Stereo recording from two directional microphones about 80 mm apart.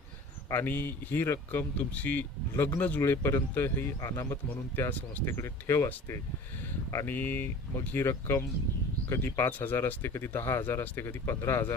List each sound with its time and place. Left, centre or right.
0.5 s speech: left
3.0 s speech: left
3.5 s speech: left
4.0 s speech: left
4.8 s speech: left
5.4 s speech: left